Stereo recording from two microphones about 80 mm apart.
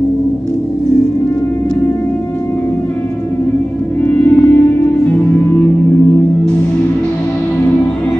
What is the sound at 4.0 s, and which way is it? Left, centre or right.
Music, left.